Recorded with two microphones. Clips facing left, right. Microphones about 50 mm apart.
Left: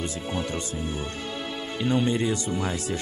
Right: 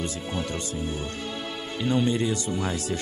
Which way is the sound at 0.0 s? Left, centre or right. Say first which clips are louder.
Left 1 dB; centre.